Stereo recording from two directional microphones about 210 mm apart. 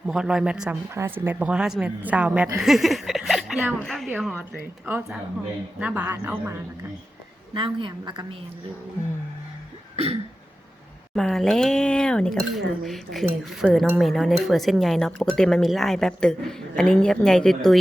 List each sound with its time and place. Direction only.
0.1 s speech: 5° right (ahead or behind)
5.8 s a man's voice: 10° right (ahead or behind)
7.5 s a woman's voice: 25° right (ahead or behind)
9.9 s cough: 30° right (ahead or behind)
11.1 s speech: centre (ahead or behind)